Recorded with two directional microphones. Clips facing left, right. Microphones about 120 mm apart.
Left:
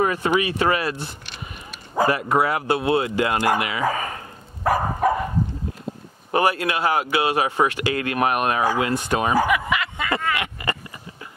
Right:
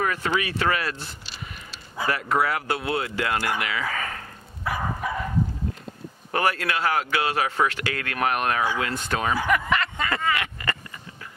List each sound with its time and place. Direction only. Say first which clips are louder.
0.0 s speech: left 5 dB; 20° left (ahead or behind)
4.6 s bow-wow: left 8 dB; 45° left (ahead or behind)
6.3 s speech: left 4 dB; 15° left (ahead or behind)
9.5 s a sound: left 1 dB; 5° left (ahead or behind)